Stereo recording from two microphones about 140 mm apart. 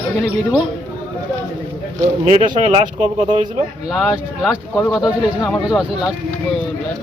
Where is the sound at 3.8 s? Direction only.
Centre (ahead or behind).